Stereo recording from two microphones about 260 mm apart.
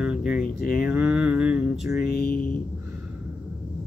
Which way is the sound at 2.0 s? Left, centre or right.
Left.